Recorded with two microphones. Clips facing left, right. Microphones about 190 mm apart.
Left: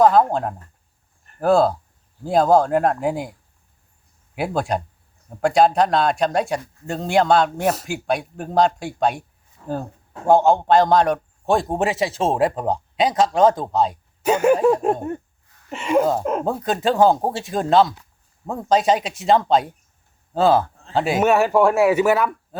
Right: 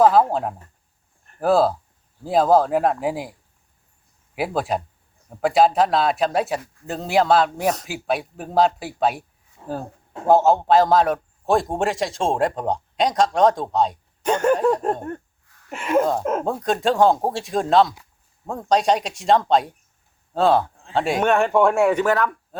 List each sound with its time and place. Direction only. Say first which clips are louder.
0.0 s a man's voice: left 1 dB; 5° right (ahead or behind)
1.2 s a sound: left 1 dB; centre (ahead or behind)
2.2 s a man's voice: left 1 dB; centre (ahead or behind)
4.4 s a man's voice: left 1 dB; centre (ahead or behind)
9.6 s a sound: left 2 dB; 20° right (ahead or behind)
10.2 s a man's voice: left 1 dB; centre (ahead or behind)
15.7 s a man's voice: left 1 dB; centre (ahead or behind)